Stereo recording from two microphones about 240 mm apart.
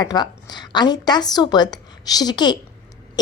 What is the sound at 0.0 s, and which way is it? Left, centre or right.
A woman's voice, centre.